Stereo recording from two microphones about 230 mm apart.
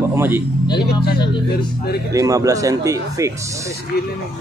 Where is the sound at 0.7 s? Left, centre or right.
Left.